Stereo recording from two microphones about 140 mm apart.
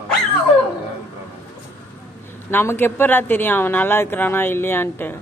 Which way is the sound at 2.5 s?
15° left (ahead or behind).